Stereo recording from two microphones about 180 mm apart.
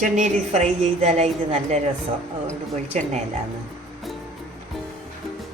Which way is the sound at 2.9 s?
40° right (ahead or behind).